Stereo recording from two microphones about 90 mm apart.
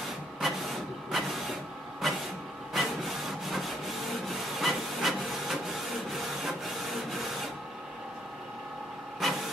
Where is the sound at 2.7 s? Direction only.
Centre (ahead or behind).